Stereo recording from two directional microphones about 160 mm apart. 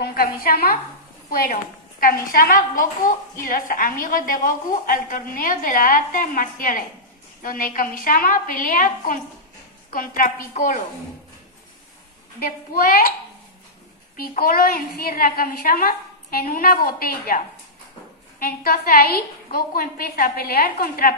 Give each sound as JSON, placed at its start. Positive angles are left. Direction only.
{"t": 0.0, "sound": "a woman's voice", "side_deg": 75}
{"t": 12.4, "sound": "a woman's voice", "side_deg": 65}
{"t": 14.1, "sound": "a woman's voice", "side_deg": 65}
{"t": 18.4, "sound": "a woman's voice", "side_deg": 65}